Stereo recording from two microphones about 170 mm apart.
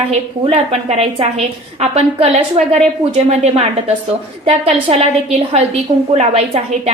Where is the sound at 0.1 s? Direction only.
40° right (ahead or behind).